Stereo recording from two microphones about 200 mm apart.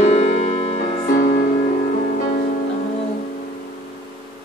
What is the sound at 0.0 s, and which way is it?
Music, 35° left (ahead or behind).